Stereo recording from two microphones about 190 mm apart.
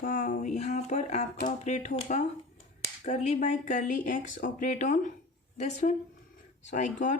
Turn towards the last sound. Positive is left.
turn(degrees=40)  # may be behind; listen again after turning